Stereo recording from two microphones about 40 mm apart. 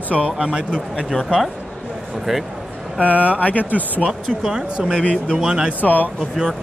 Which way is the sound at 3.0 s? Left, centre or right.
Left.